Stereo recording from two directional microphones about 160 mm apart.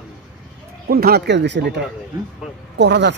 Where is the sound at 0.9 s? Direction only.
75° right (ahead or behind); by 3.1 s 90° right.